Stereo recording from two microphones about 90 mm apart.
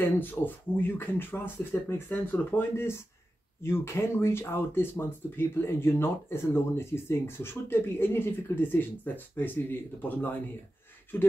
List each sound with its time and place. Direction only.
0.0 s speech: 20° left (ahead or behind)